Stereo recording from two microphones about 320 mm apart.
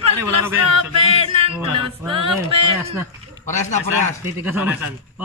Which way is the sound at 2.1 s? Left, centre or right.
Centre.